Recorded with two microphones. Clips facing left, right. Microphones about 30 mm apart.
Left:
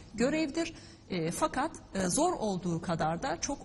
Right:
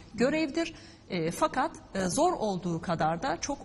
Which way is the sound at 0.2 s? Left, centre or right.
Centre.